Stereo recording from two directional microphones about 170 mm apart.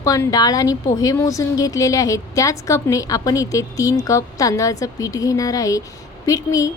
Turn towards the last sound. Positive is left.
turn(degrees=20)  # may be behind; listen again after turning